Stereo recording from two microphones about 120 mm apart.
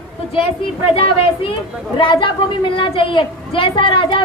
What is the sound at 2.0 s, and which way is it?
A woman's voice, 45° left (ahead or behind).